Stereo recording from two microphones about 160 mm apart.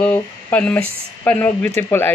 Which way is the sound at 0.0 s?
10° left (ahead or behind).